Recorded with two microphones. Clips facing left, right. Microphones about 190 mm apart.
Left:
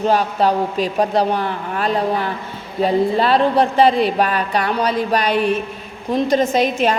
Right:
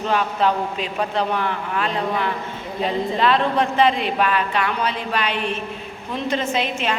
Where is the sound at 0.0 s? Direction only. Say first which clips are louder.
Left 4 dB; 35° left (ahead or behind).